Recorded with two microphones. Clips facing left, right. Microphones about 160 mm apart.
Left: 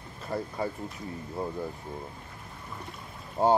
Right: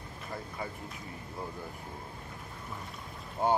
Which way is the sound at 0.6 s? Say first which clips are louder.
Left 7 dB; 30° left (ahead or behind).